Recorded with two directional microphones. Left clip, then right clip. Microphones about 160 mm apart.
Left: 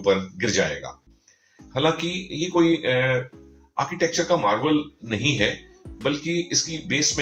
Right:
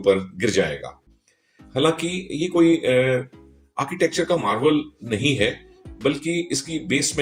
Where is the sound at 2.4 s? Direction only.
50° right (ahead or behind).